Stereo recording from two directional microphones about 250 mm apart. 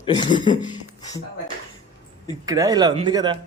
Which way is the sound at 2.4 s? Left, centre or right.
Centre.